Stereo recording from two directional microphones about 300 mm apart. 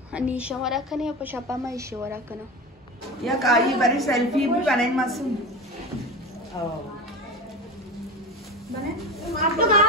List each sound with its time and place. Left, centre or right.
0.1 s a woman's voice: centre
3.3 s a woman's voice: centre
6.5 s speech: centre
9.4 s speech: right